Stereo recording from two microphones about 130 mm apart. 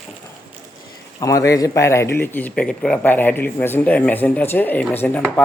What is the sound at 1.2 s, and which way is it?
A man's voice, 25° left (ahead or behind).